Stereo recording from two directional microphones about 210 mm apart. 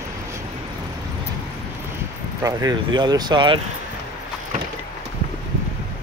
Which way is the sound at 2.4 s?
20° right (ahead or behind).